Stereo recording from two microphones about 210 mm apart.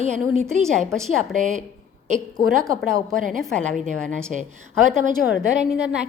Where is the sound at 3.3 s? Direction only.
Centre (ahead or behind).